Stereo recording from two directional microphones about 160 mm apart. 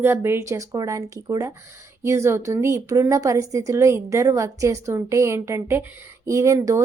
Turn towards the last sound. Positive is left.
turn(degrees=-20)  # may be behind; listen again after turning